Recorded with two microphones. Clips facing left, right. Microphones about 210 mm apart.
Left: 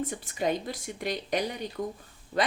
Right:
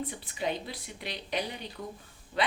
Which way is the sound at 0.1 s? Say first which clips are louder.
Left 4 dB; 45° left (ahead or behind).